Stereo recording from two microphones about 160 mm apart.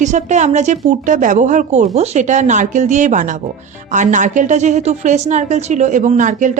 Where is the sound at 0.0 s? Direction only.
50° right (ahead or behind).